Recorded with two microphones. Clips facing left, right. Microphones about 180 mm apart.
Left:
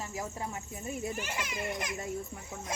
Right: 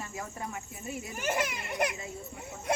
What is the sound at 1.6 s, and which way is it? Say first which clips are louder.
A child's voice: right 3 dB; 65° right (ahead or behind).